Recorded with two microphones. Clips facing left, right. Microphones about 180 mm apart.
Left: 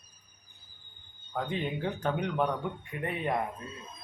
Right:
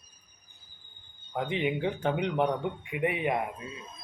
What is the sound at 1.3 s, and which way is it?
Speech, 15° right (ahead or behind).